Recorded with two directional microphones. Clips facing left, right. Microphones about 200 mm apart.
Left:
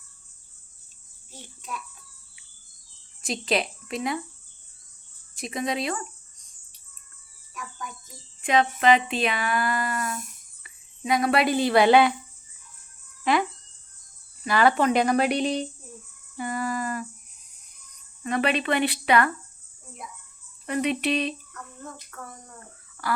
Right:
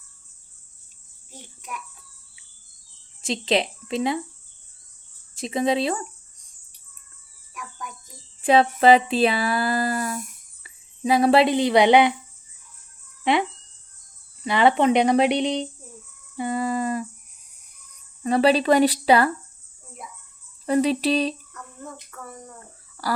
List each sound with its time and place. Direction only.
1.3 s a child's voice: 15° right (ahead or behind)
3.2 s speech: 25° right (ahead or behind)
5.3 s speech: 25° right (ahead or behind)
8.4 s speech: 30° right (ahead or behind)
13.3 s speech: 25° right (ahead or behind)
14.4 s speech: 25° right (ahead or behind)
16.4 s a sound: 25° right (ahead or behind)
18.2 s speech: 35° right (ahead or behind)
20.7 s speech: 35° right (ahead or behind)